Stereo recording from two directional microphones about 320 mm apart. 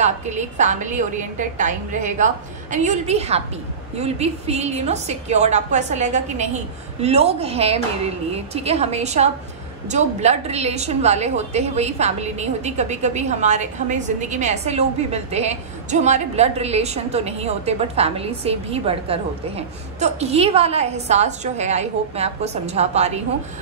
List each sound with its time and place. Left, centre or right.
0.0 s a woman's voice: right